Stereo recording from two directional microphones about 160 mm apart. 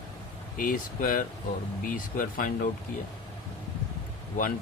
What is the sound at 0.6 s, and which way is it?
Speech, 60° left (ahead or behind).